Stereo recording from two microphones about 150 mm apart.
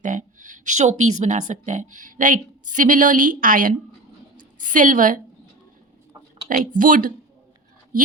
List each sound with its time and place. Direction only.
0.0 s a woman's voice: 55° right (ahead or behind)
6.5 s a woman's voice: 65° right (ahead or behind)